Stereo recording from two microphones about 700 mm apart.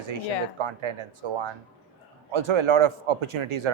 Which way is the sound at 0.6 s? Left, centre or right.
Right.